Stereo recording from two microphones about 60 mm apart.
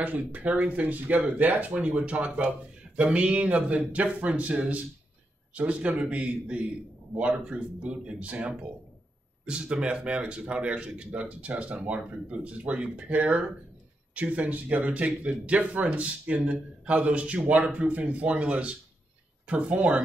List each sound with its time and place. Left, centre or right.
0.0 s speech: right